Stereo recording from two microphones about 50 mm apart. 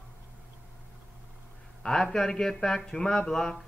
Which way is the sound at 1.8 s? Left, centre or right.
Centre.